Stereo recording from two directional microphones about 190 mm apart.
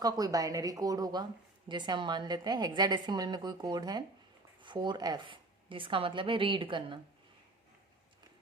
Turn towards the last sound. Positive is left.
turn(degrees=-25)  # may be behind; listen again after turning